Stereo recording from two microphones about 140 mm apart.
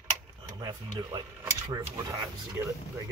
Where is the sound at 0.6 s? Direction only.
25° right (ahead or behind).